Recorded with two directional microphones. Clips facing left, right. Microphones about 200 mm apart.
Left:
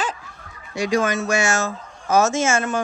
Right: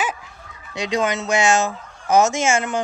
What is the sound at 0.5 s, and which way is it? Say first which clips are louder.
Speech: left 3 dB; 20° right (ahead or behind).